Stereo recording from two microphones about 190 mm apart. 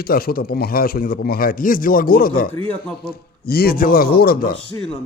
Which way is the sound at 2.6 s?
10° left (ahead or behind).